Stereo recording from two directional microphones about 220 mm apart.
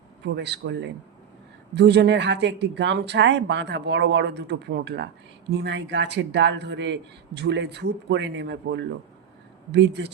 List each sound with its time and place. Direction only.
0.3 s speech: 50° right (ahead or behind)